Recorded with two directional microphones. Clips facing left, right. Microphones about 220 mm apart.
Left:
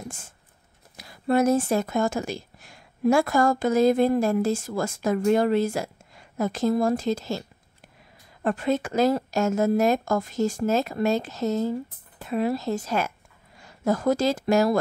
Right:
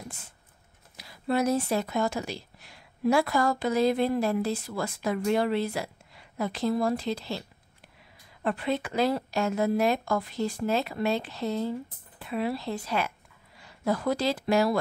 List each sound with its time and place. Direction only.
0.9 s a woman's voice: 50° left (ahead or behind)